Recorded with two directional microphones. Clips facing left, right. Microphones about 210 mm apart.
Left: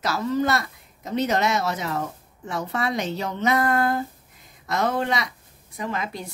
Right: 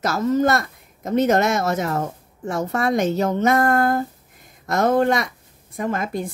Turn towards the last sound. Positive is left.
turn(degrees=-50)  # may be behind; listen again after turning